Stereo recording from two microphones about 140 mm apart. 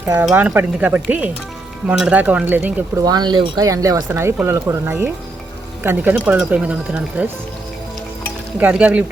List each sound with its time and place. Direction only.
0.2 s speech: 10° right (ahead or behind)
3.0 s speech: 30° right (ahead or behind); by 7.3 s 10° right (ahead or behind)
8.5 s speech: 10° right (ahead or behind)